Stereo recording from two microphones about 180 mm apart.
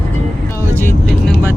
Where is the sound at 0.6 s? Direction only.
10° left (ahead or behind).